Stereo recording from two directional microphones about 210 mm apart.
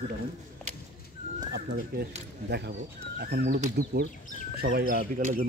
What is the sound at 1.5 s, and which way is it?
Speech, 50° right (ahead or behind).